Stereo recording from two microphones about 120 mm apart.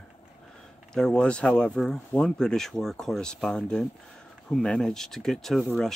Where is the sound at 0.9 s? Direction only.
5° left (ahead or behind).